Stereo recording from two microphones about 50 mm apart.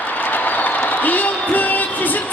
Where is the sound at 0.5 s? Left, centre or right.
Left.